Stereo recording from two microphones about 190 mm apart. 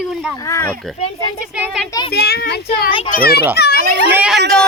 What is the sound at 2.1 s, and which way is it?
A child's voice, 55° left (ahead or behind).